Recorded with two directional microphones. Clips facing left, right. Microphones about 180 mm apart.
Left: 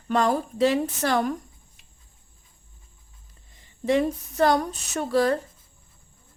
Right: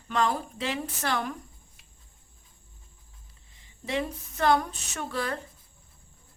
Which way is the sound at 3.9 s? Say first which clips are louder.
Left 9 dB; 40° left (ahead or behind).